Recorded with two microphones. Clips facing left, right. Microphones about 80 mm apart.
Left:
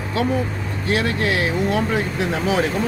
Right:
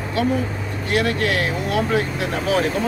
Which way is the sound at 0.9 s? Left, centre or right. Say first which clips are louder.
Even; left.